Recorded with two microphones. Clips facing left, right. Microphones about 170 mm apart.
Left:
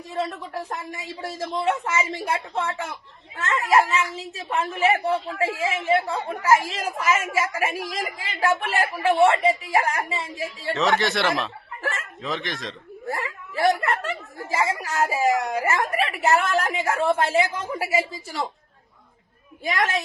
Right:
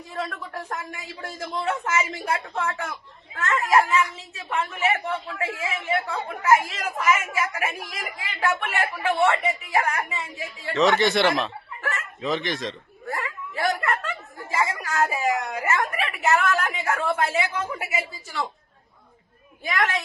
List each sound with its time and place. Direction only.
0.1 s a woman's voice: 25° left (ahead or behind)
10.8 s speech: centre (ahead or behind)
13.1 s a sound: 30° left (ahead or behind)
14.5 s a woman's voice: 30° left (ahead or behind)
19.6 s speech: 25° left (ahead or behind)